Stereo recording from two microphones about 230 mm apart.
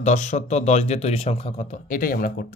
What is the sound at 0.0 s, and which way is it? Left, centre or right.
Speech, left.